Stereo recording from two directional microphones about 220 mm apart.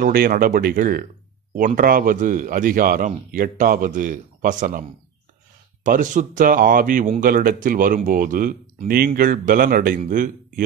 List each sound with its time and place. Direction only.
0.0 s speech: 40° right (ahead or behind)
5.9 s speech: 35° right (ahead or behind)